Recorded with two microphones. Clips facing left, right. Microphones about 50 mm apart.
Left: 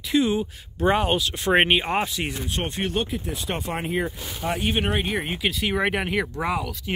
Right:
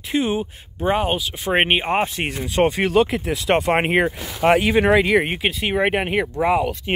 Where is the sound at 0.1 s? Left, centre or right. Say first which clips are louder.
Even; right.